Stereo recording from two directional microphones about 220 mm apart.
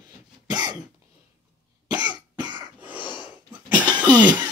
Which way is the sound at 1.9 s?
5° right (ahead or behind).